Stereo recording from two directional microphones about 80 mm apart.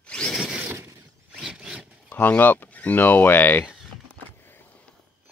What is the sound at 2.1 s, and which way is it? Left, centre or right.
Speech, left.